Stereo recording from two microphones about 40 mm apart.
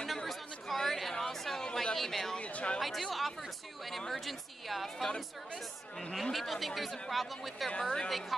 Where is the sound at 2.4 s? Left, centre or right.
Left.